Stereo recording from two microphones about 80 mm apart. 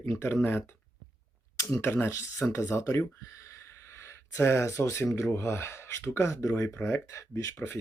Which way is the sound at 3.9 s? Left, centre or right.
Left.